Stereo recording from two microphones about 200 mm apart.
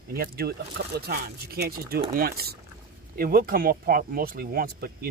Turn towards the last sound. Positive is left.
turn(degrees=-50)  # may be behind; listen again after turning